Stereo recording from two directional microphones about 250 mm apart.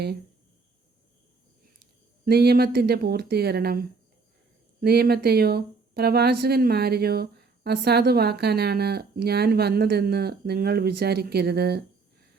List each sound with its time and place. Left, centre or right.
2.2 s speech: right